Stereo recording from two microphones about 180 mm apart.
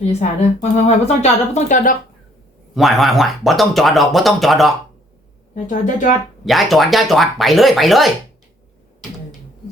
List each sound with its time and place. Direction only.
0.0 s a woman's voice: 40° left (ahead or behind)
2.7 s speech: centre (ahead or behind)
5.6 s speech: 45° left (ahead or behind)
6.4 s speech: centre (ahead or behind)